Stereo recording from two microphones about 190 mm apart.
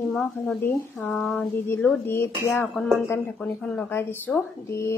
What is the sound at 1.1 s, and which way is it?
A woman's voice, centre (ahead or behind).